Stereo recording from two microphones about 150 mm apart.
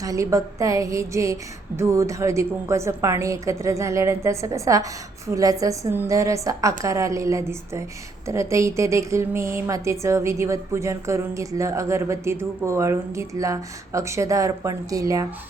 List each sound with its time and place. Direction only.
0.0 s a woman's voice: 20° right (ahead or behind)